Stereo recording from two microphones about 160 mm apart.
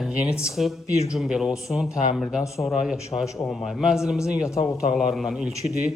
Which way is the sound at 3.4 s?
Centre (ahead or behind).